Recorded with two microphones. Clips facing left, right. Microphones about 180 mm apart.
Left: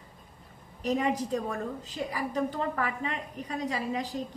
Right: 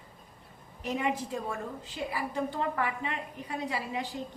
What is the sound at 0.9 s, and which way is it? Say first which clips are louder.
A woman's voice: left 3 dB; 40° left (ahead or behind).